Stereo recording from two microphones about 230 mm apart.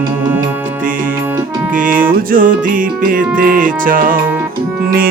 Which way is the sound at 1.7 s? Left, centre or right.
Right.